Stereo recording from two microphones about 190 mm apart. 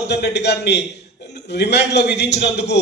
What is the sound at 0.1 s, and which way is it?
A man's voice, 60° left (ahead or behind).